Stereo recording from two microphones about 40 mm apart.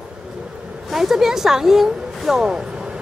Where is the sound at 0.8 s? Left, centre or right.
Centre.